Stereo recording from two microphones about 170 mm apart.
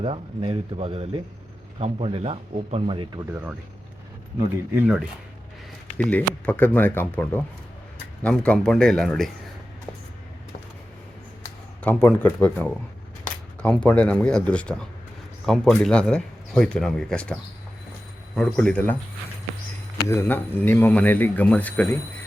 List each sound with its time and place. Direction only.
0.0 s speech: 35° right (ahead or behind)
4.4 s speech: 10° right (ahead or behind)
6.0 s speech: 10° left (ahead or behind)
11.8 s speech: 10° left (ahead or behind)
18.3 s speech: 5° left (ahead or behind)
20.1 s speech: 15° left (ahead or behind)